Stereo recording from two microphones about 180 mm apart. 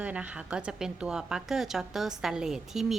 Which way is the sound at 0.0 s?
5° right (ahead or behind).